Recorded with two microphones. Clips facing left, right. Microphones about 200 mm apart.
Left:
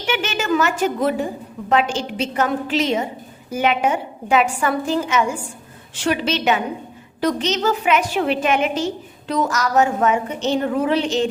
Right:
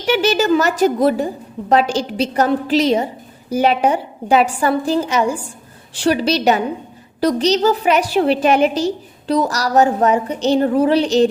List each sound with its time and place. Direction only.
0.0 s a woman's voice: 35° right (ahead or behind)